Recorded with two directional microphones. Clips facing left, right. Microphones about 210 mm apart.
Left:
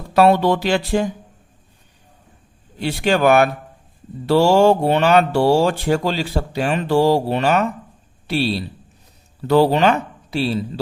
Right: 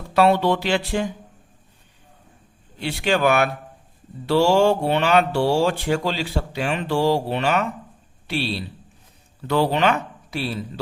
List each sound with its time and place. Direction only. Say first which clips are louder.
0.1 s speech: left 3 dB; 45° left (ahead or behind)
2.7 s speech: left 3 dB; 45° left (ahead or behind)
9.5 s a man's voice: left 5 dB; 35° left (ahead or behind)